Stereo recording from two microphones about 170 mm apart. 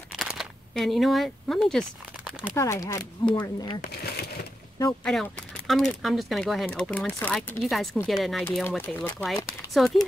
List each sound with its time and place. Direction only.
0.2 s camera: centre (ahead or behind)
2.5 s speech: 15° left (ahead or behind)
3.8 s a sound: 70° left (ahead or behind)
5.0 s speech: 5° left (ahead or behind)
8.6 s speech: 10° left (ahead or behind)